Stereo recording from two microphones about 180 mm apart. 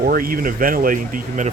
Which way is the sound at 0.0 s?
55° right (ahead or behind).